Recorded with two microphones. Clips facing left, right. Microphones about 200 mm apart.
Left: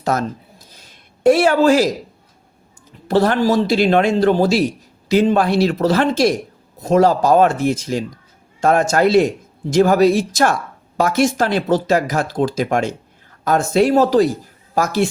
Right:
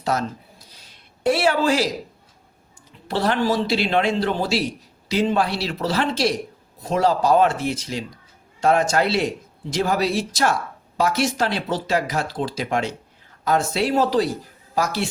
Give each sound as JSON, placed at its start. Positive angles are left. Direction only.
{"t": 0.0, "sound": "speech", "side_deg": 50}
{"t": 0.7, "sound": "a sound", "side_deg": 50}
{"t": 3.1, "sound": "speech", "side_deg": 45}